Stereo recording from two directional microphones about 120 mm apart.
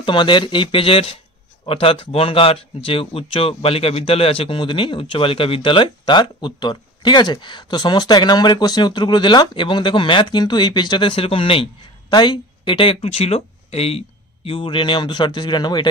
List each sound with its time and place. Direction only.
0.0 s speech: 40° left (ahead or behind)